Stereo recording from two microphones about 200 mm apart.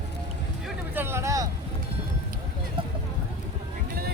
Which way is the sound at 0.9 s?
10° right (ahead or behind).